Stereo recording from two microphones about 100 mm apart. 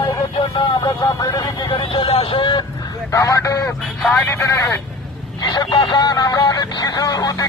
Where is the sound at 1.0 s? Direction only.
40° left (ahead or behind).